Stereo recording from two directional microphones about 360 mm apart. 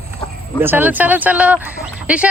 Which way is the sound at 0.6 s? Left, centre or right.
Centre.